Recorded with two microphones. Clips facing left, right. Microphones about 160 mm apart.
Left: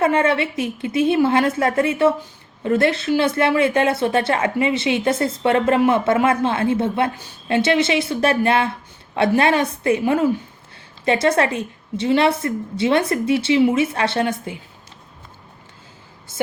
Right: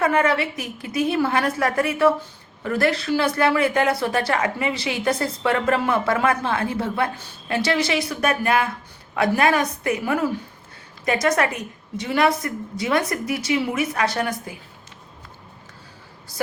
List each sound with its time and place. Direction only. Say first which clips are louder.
0.0 s speech: left 2 dB; 25° left (ahead or behind)
16.3 s speech: left 4 dB; 20° left (ahead or behind)